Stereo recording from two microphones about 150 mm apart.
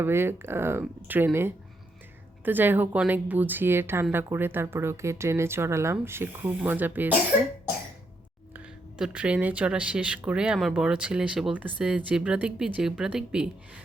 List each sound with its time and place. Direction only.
0.0 s speech: 15° right (ahead or behind)
8.5 s speech: 5° right (ahead or behind)